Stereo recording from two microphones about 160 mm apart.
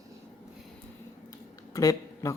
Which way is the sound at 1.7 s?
20° left (ahead or behind).